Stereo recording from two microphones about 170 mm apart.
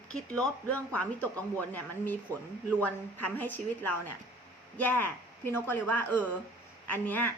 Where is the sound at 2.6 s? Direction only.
10° left (ahead or behind).